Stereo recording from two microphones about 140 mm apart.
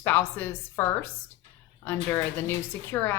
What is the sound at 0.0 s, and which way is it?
Speech, 15° left (ahead or behind).